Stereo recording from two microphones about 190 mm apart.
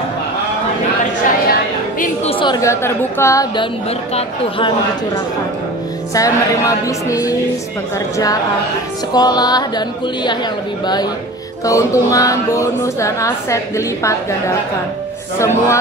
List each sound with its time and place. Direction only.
2.2 s a woman's voice: 25° left (ahead or behind)
4.1 s speech: 30° left (ahead or behind)
6.1 s a woman's voice: 15° left (ahead or behind)
9.1 s speech: 20° left (ahead or behind)
11.6 s a woman's voice: 15° left (ahead or behind)
15.3 s a woman's voice: 15° left (ahead or behind)